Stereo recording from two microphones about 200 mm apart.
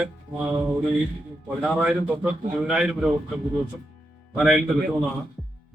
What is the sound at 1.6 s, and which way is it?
Speech, 5° right (ahead or behind).